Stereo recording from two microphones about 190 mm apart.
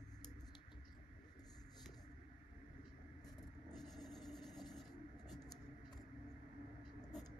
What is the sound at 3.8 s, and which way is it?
Writing, centre (ahead or behind).